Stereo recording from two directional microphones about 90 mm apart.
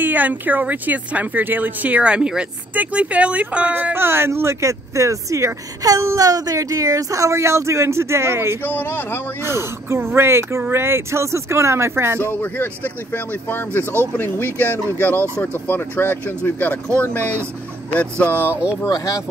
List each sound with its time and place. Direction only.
0.0 s speech: 20° right (ahead or behind)
3.9 s speech: 25° right (ahead or behind)
8.6 s speech: 20° left (ahead or behind)
9.4 s speech: 30° right (ahead or behind)
12.3 s speech: 20° left (ahead or behind)
18.5 s speech: 15° right (ahead or behind)
18.9 s speech: 35° left (ahead or behind)